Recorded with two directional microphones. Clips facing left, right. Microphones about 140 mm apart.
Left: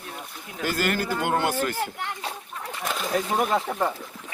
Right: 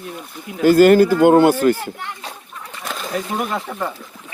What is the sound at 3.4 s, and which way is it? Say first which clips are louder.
Speech: even; 25° left (ahead or behind).